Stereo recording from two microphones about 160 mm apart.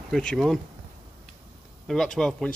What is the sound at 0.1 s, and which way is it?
Speech, 5° left (ahead or behind).